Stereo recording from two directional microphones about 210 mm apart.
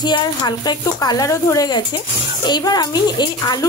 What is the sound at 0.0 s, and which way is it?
A woman's voice, 20° left (ahead or behind).